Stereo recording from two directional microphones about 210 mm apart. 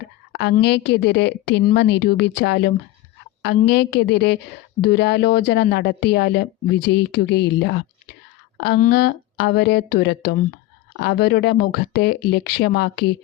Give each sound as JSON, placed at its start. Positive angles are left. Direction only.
{"t": 0.0, "sound": "a woman's voice", "side_deg": 55}